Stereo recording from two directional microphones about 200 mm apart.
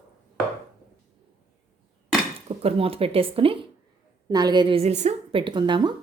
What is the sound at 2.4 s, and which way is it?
A woman's voice, 30° right (ahead or behind).